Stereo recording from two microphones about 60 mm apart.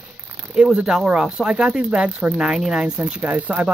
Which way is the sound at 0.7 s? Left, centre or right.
Centre.